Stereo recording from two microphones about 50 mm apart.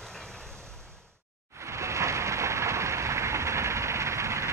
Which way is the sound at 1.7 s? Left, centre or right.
Right.